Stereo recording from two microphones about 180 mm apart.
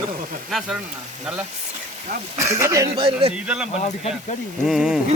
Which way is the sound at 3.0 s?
30° right (ahead or behind).